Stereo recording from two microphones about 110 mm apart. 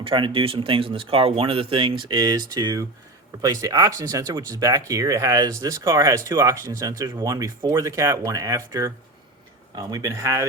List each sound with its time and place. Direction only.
0.0 s speech: 50° right (ahead or behind); by 10.4 s 30° right (ahead or behind)